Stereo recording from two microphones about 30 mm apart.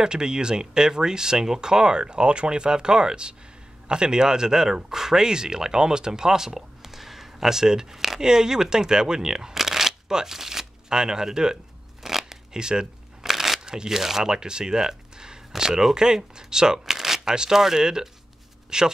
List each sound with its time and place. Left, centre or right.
0.0 s speech: right
9.6 s shuffling cards: centre
10.1 s speech: centre
12.0 s a sound: centre
12.5 s speech: right
13.2 s a sound: centre
13.7 s speech: centre
14.2 s speech: right
17.2 s speech: right
18.7 s speech: right